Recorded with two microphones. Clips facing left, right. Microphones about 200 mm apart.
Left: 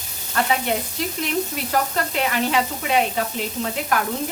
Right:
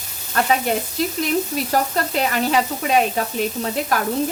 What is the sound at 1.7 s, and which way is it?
A woman's voice, 40° right (ahead or behind).